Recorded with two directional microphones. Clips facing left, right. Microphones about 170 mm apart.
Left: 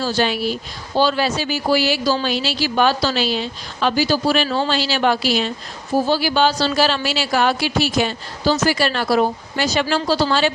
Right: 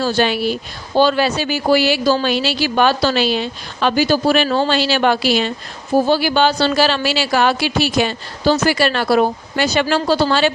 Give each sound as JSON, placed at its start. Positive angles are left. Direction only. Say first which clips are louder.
{"t": 0.0, "sound": "speech", "louder": "right 3 dB", "side_deg": -60}